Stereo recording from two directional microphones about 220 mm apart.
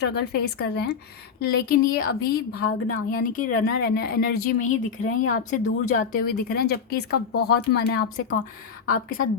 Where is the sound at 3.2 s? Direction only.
35° left (ahead or behind).